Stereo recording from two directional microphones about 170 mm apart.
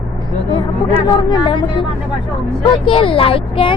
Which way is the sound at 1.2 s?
30° left (ahead or behind).